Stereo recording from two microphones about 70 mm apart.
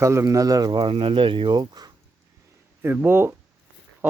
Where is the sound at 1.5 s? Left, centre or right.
Right.